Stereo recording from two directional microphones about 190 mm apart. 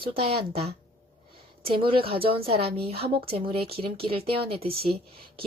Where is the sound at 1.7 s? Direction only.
25° right (ahead or behind).